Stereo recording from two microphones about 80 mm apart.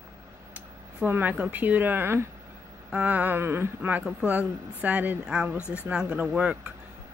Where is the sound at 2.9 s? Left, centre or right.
Centre.